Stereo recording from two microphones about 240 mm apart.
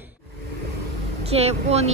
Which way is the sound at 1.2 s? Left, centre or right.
Right.